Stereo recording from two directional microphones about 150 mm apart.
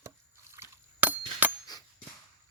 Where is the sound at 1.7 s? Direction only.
25° left (ahead or behind).